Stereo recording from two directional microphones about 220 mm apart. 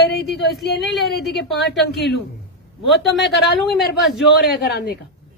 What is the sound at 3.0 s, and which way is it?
A woman's voice, 50° left (ahead or behind).